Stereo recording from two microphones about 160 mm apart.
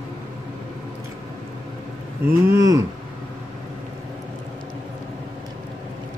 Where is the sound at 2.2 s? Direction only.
20° right (ahead or behind).